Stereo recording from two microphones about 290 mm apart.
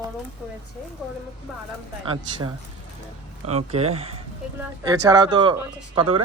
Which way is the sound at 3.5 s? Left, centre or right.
Right.